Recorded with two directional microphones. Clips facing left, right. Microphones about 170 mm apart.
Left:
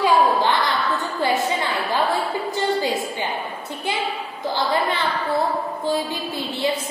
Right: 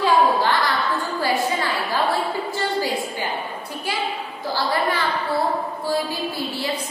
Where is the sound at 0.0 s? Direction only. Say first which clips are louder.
Even; 20° left (ahead or behind).